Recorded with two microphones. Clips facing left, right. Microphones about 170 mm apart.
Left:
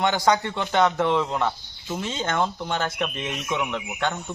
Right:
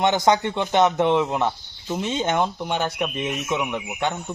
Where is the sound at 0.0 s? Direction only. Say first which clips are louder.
Right 2 dB; 20° right (ahead or behind).